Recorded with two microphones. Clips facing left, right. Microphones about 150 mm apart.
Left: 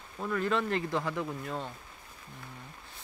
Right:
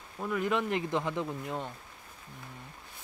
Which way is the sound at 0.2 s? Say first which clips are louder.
Even; 15° right (ahead or behind).